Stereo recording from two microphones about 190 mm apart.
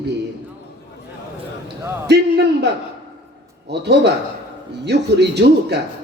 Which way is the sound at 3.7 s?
60° right (ahead or behind).